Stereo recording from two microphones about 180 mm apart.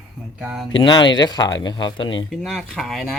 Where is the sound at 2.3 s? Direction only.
5° right (ahead or behind).